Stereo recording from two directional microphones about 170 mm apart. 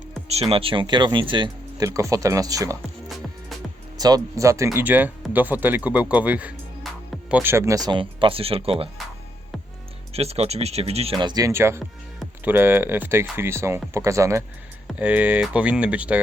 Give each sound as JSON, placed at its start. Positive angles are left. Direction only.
{"t": 0.3, "sound": "speech", "side_deg": -35}
{"t": 3.9, "sound": "speech", "side_deg": -20}
{"t": 10.1, "sound": "speech", "side_deg": -35}
{"t": 11.2, "sound": "speech", "side_deg": -25}